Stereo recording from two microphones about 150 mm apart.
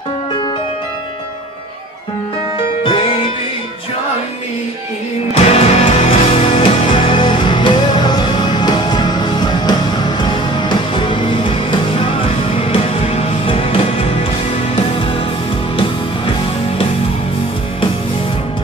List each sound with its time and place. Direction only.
2.8 s music: 35° left (ahead or behind)
5.3 s music: 40° left (ahead or behind)